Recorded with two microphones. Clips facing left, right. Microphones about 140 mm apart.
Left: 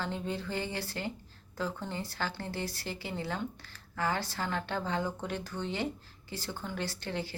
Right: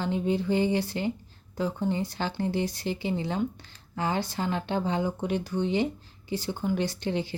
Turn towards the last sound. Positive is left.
turn(degrees=-20)  # may be behind; listen again after turning